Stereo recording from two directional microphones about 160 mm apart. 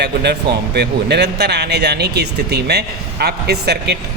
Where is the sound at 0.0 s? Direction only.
90° right.